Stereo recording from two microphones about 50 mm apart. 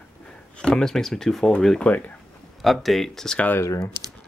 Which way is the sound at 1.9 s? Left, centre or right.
Left.